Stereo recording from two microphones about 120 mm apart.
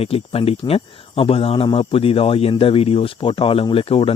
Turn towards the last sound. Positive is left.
turn(degrees=50)  # may be behind; listen again after turning